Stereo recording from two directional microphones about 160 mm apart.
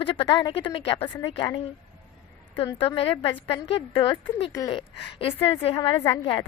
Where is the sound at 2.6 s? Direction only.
30° left (ahead or behind).